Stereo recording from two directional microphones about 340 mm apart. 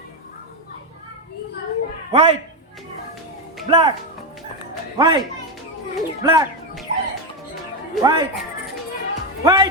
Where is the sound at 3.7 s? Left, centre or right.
Centre.